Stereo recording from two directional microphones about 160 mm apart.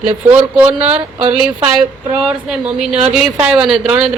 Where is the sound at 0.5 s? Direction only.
10° right (ahead or behind).